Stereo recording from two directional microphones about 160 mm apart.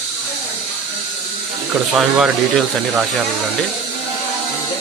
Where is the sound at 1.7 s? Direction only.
5° right (ahead or behind).